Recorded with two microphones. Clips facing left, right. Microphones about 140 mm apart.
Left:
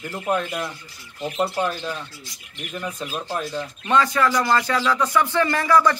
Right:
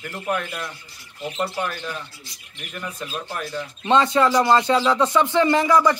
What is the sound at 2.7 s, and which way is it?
Speech, 20° left (ahead or behind).